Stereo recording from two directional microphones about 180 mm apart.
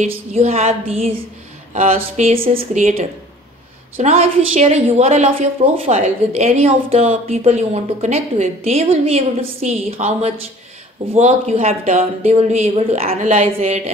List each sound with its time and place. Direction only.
0.3 s a woman's voice: 35° right (ahead or behind)